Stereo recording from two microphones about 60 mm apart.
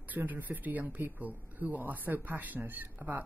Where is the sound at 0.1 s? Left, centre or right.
Right.